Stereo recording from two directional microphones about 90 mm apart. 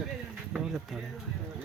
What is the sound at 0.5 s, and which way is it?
Speech, 5° right (ahead or behind).